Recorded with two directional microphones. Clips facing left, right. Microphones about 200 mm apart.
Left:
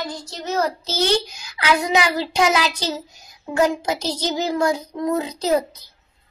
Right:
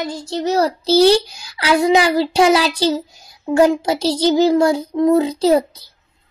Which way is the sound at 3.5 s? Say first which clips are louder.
Right 6 dB; 30° right (ahead or behind).